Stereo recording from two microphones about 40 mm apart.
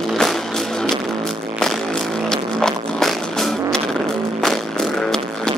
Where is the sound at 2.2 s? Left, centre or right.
Centre.